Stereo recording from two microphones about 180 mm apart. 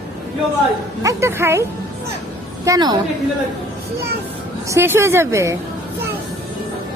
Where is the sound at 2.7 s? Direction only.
25° right (ahead or behind).